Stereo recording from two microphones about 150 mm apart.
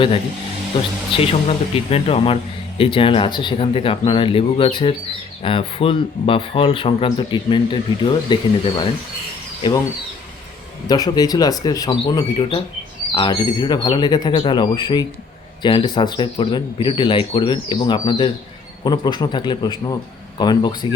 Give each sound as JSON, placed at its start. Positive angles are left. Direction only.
{"t": 0.7, "sound": "speech", "side_deg": 35}
{"t": 9.6, "sound": "speech", "side_deg": 30}
{"t": 10.8, "sound": "speech", "side_deg": 25}